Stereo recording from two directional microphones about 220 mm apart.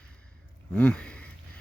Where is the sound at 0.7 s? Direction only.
5° left (ahead or behind).